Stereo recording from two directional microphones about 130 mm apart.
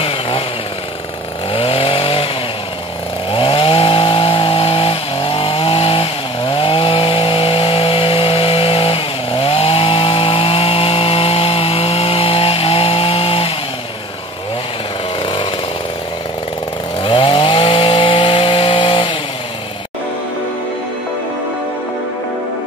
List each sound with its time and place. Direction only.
1.5 s chainsaw: 45° left (ahead or behind)
17.0 s chainsaw: 40° left (ahead or behind)